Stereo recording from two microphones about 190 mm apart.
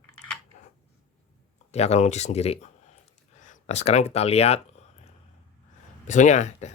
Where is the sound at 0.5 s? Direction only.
40° left (ahead or behind).